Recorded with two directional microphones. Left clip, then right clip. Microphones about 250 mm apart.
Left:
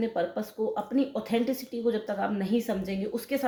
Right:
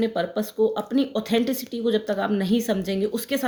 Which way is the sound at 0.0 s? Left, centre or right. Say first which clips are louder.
Right 5 dB; right.